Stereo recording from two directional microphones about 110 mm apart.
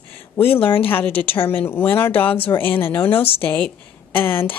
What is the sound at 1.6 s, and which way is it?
A woman's voice, 20° left (ahead or behind).